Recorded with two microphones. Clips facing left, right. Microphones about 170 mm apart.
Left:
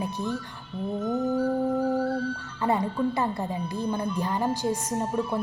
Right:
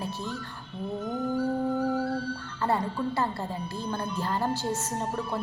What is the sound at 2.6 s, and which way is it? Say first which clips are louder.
Speech: left 3 dB; 15° left (ahead or behind).